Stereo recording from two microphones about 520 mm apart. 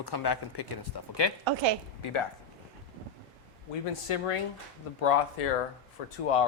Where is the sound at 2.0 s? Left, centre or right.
Left.